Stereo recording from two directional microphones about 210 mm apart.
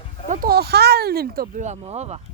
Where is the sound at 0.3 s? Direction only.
45° right (ahead or behind).